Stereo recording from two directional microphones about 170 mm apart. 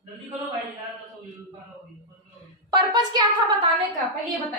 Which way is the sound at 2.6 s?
25° right (ahead or behind).